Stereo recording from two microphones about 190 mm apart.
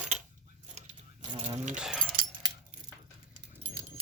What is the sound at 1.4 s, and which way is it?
Coin, 30° right (ahead or behind).